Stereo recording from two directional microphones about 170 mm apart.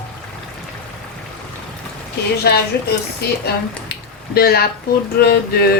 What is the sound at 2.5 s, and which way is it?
Speech, 70° left (ahead or behind).